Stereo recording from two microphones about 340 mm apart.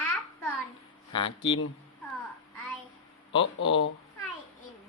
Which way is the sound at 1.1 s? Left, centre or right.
Centre.